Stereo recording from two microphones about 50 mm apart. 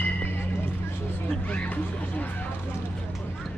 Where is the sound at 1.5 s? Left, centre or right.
Left.